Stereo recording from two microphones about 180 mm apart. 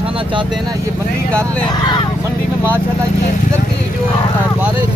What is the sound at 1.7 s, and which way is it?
Speech, 25° left (ahead or behind).